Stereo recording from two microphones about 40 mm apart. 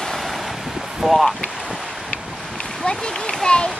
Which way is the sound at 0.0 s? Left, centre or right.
Centre.